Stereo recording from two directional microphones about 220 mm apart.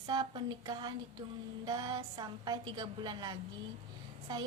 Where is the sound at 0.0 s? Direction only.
20° right (ahead or behind).